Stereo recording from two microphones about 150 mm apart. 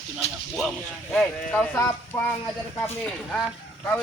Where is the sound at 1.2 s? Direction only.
5° left (ahead or behind).